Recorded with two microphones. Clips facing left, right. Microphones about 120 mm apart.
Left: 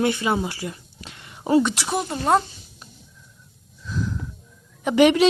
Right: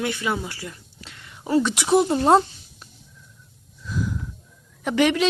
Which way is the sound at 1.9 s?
25° right (ahead or behind).